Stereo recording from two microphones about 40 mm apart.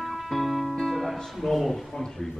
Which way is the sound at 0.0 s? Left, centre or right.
Centre.